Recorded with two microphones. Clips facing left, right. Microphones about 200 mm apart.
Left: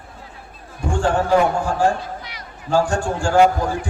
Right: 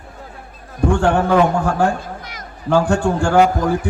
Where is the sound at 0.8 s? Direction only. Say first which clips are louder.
Right 3 dB; 60° right (ahead or behind).